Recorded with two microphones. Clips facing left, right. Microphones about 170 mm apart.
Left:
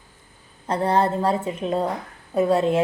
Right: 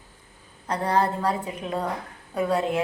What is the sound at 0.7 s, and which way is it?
A woman's voice, 25° left (ahead or behind).